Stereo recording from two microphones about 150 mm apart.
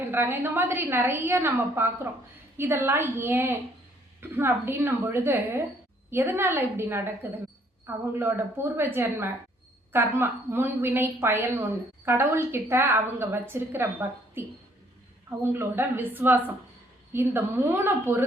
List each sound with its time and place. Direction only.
0.0 s a woman's voice: 15° right (ahead or behind)
15.5 s a woman's voice: 15° right (ahead or behind)